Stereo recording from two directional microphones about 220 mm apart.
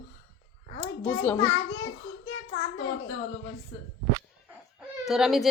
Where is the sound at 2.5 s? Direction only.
60° left (ahead or behind).